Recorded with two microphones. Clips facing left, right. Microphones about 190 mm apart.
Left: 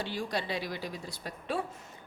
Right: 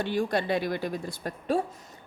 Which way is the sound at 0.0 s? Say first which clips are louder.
Right 7 dB; 55° right (ahead or behind).